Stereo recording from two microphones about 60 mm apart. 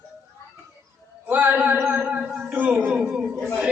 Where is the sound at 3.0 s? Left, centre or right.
Centre.